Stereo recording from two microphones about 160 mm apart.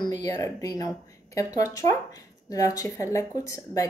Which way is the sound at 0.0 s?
25° left (ahead or behind).